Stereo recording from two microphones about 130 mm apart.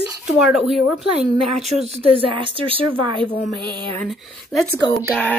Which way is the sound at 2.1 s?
40° right (ahead or behind).